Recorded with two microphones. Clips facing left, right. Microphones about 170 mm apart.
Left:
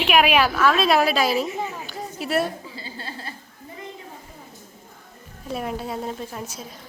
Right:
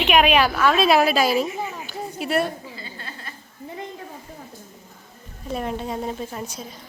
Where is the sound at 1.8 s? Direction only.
Centre (ahead or behind).